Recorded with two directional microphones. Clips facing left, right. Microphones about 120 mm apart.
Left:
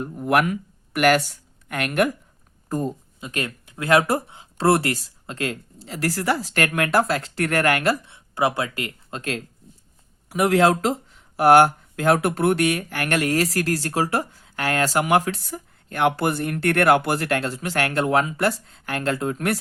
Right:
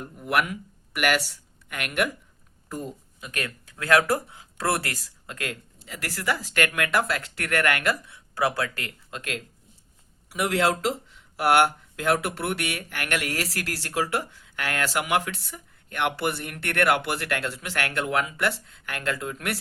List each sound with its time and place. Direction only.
0.2 s speech: 45° left (ahead or behind)
3.2 s speech: 25° left (ahead or behind)
9.0 s speech: 35° left (ahead or behind)
10.2 s speech: 45° left (ahead or behind)